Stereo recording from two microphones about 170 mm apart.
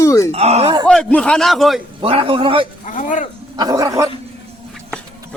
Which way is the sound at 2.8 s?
50° left (ahead or behind).